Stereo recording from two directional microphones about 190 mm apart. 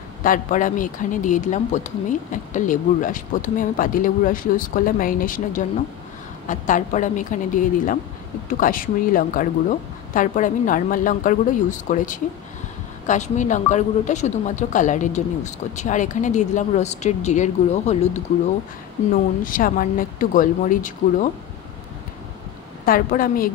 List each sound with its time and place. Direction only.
0.2 s a woman's voice: 45° left (ahead or behind)
19.4 s speech: 45° left (ahead or behind)
22.8 s speech: 50° left (ahead or behind)